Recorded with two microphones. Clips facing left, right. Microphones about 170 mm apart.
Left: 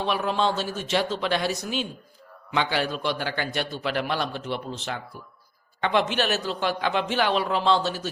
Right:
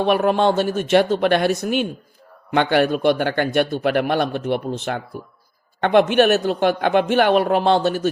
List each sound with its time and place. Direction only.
0.0 s a man's voice: 55° right (ahead or behind)